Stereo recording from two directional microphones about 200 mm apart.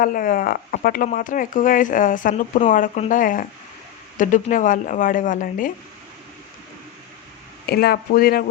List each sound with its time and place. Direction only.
0.0 s speech: 45° left (ahead or behind)
7.7 s speech: 50° left (ahead or behind)